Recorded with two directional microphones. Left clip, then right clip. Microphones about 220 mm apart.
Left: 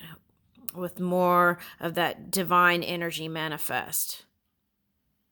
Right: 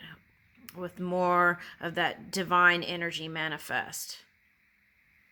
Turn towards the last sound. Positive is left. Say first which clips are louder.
# left 2 dB
turn(degrees=45)  # may be behind; listen again after turning